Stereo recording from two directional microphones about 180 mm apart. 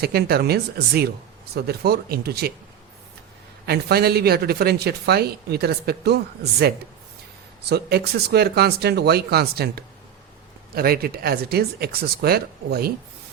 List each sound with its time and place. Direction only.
0.0 s speech: 60° right (ahead or behind)
3.7 s speech: 60° right (ahead or behind)